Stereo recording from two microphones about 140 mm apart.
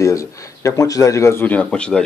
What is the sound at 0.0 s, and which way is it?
Speech, 25° left (ahead or behind).